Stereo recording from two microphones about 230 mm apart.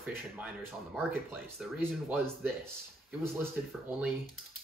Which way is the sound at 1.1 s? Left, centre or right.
Centre.